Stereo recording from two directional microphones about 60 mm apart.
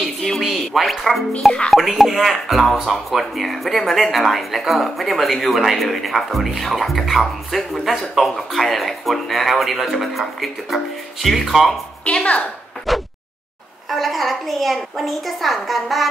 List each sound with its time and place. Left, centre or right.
0.0 s music: centre
1.7 s speech: centre
12.0 s a child's voice: centre
12.9 s speech: centre